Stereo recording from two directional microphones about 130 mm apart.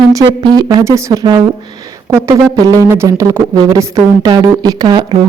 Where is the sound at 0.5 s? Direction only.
30° right (ahead or behind).